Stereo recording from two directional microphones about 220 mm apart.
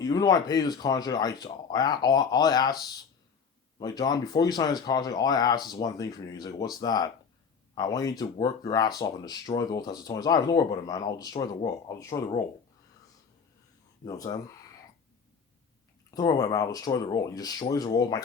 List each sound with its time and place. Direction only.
0.0 s speech: 15° left (ahead or behind)
3.8 s speech: 15° left (ahead or behind)
14.0 s speech: 15° left (ahead or behind)
16.1 s speech: 15° left (ahead or behind)